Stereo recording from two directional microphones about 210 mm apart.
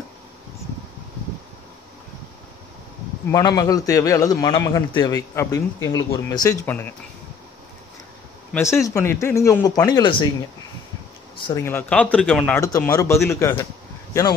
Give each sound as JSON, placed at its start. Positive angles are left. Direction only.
{"t": 3.3, "sound": "a man's voice", "side_deg": 15}
{"t": 8.5, "sound": "a man's voice", "side_deg": 10}
{"t": 11.4, "sound": "a man's voice", "side_deg": 15}